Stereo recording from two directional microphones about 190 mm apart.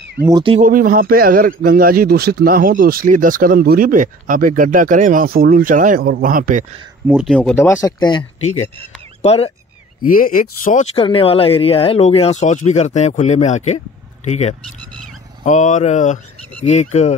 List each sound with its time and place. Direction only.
0.3 s speech: 25° right (ahead or behind)
0.6 s a man's voice: 45° right (ahead or behind)
7.1 s speech: 5° right (ahead or behind)
7.3 s speech: 10° left (ahead or behind)
9.2 s speech: 35° left (ahead or behind)
10.0 s speech: 45° left (ahead or behind)
11.0 s speech: 30° left (ahead or behind)